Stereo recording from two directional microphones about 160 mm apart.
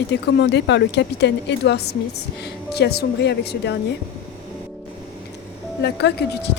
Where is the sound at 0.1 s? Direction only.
90° left.